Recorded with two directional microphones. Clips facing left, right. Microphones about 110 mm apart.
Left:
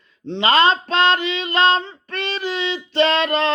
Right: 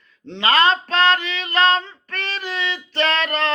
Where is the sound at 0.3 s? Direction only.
20° left (ahead or behind).